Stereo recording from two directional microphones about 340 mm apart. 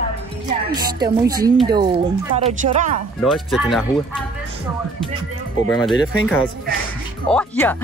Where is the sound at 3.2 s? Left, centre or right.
Centre.